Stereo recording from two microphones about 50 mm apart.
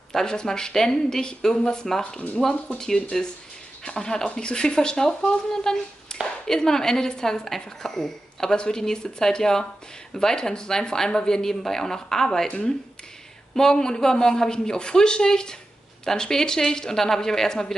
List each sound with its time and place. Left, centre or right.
0.1 s speech: centre
6.1 s a sound: centre
6.4 s speech: centre